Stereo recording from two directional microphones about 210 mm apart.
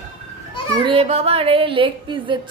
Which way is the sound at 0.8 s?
25° right (ahead or behind).